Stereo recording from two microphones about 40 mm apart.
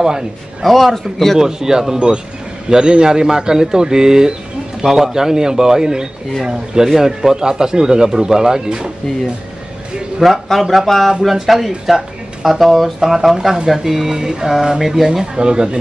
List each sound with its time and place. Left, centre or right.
0.0 s speech: centre
0.7 s speech: centre
1.4 s speech: centre
10.2 s speech: centre
15.0 s speech: right